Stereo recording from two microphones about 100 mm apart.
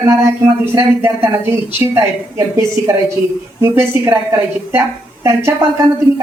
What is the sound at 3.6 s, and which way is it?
A woman's voice, 25° right (ahead or behind).